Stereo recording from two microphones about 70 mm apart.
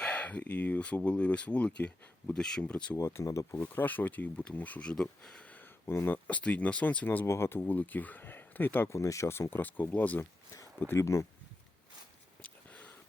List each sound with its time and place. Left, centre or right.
0.0 s speech: left
2.9 s speech: left
3.2 s speech: left
3.6 s speech: left; by 5.5 s centre
5.5 s a sound: left
6.2 s speech: left
7.3 s speech: left
8.9 s speech: left
10.8 s speech: left
12.4 s a sound: centre